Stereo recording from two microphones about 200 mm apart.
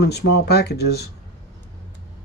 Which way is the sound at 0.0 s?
55° left (ahead or behind).